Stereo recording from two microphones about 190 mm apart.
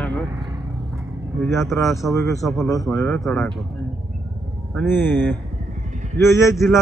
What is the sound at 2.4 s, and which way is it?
Speech, centre (ahead or behind).